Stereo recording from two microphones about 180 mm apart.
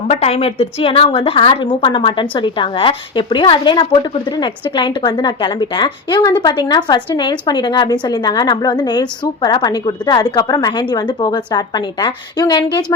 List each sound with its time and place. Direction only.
0.1 s a woman's voice: 35° left (ahead or behind)